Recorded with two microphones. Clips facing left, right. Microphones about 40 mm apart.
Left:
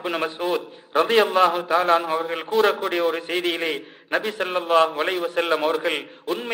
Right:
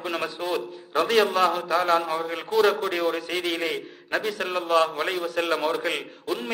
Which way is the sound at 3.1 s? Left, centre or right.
Left.